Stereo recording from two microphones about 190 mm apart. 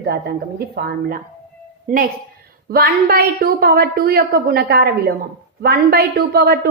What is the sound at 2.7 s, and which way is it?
A woman's voice, 55° right (ahead or behind).